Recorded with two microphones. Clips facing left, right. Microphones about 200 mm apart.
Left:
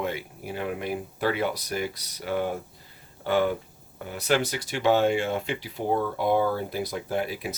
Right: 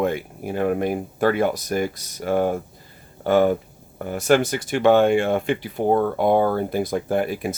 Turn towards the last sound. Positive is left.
turn(degrees=-50)  # may be behind; listen again after turning